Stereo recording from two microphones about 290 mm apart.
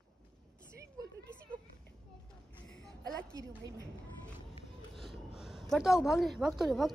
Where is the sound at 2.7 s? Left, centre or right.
Centre.